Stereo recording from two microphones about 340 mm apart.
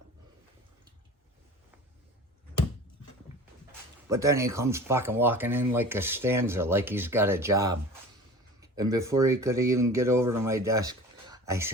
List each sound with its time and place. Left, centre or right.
4.1 s speech: centre